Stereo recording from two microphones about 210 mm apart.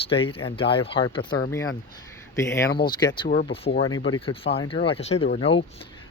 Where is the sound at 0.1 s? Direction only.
25° left (ahead or behind).